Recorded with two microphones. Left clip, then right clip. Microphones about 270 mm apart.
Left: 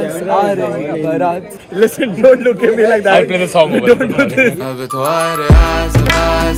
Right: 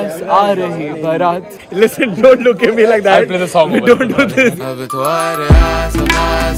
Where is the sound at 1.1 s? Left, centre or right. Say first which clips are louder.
Right 4 dB; right.